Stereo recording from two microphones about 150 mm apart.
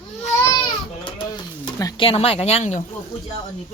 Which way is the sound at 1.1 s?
35° left (ahead or behind).